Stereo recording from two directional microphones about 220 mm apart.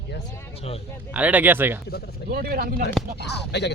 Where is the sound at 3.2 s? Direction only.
50° left (ahead or behind).